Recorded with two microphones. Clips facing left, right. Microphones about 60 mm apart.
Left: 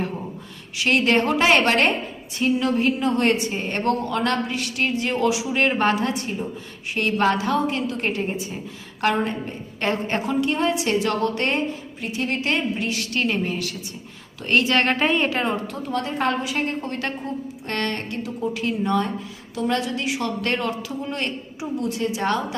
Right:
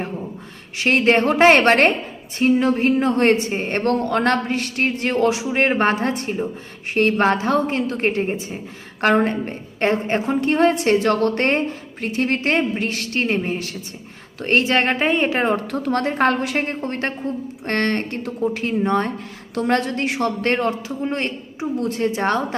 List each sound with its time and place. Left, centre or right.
0.8 s a woman's voice: right
9.0 s a woman's voice: right
9.8 s a woman's voice: right
15.4 s a woman's voice: right
16.6 s a woman's voice: right
19.5 s a woman's voice: right
21.8 s a woman's voice: right